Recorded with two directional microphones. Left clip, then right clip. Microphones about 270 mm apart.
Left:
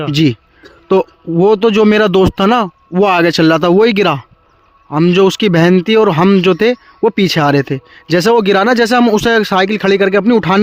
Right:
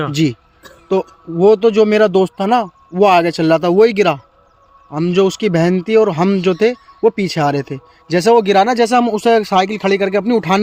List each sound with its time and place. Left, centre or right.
0.1 s speech: left